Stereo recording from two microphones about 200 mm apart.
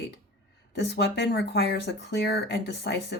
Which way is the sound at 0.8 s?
60° left (ahead or behind).